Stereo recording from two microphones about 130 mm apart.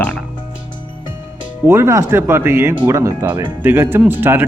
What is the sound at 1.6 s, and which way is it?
Speech, 20° right (ahead or behind).